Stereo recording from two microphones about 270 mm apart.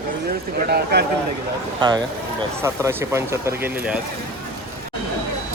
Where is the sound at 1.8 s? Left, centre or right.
Centre.